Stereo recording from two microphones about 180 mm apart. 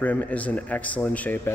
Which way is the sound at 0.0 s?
10° left (ahead or behind).